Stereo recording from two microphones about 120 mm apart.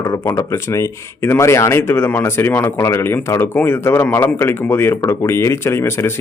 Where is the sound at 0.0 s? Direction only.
25° left (ahead or behind).